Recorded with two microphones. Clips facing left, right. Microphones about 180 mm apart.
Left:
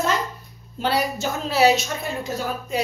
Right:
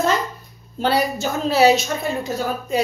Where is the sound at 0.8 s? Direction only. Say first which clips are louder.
Right 3 dB; 35° right (ahead or behind).